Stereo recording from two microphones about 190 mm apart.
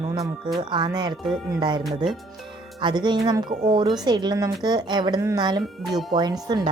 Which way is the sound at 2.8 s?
25° right (ahead or behind).